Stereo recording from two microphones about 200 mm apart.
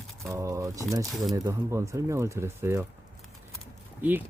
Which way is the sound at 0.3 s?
15° right (ahead or behind).